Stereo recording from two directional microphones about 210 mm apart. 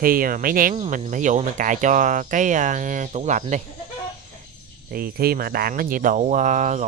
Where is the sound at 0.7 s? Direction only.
30° right (ahead or behind).